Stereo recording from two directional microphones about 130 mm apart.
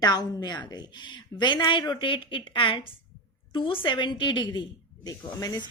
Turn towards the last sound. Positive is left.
turn(degrees=30)  # may be behind; listen again after turning